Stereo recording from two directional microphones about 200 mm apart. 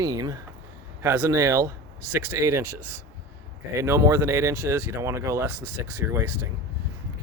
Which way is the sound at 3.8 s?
15° right (ahead or behind).